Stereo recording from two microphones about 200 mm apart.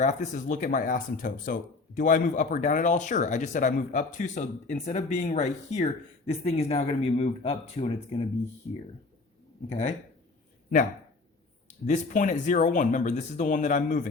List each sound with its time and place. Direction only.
0.0 s speech: 35° left (ahead or behind)
9.6 s speech: 35° left (ahead or behind)
11.9 s speech: 40° left (ahead or behind)